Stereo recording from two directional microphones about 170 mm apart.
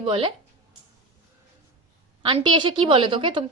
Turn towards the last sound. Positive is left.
turn(degrees=-30)  # may be behind; listen again after turning